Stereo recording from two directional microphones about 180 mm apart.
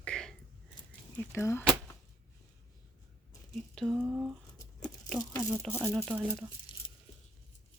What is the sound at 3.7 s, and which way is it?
Speech, centre (ahead or behind).